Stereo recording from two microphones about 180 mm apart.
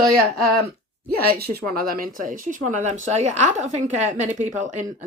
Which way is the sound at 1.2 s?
55° right (ahead or behind).